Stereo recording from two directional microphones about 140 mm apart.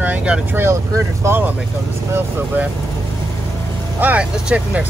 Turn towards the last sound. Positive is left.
turn(degrees=-10)  # may be behind; listen again after turning